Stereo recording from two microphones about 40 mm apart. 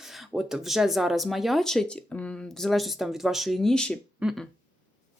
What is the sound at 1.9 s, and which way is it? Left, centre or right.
Speech, left.